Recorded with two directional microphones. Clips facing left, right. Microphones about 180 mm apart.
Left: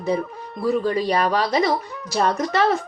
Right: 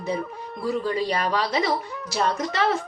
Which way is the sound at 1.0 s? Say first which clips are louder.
Left 4 dB; 35° left (ahead or behind).